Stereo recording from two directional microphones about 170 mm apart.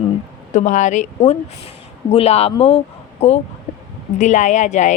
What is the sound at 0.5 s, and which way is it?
Speech, 45° left (ahead or behind).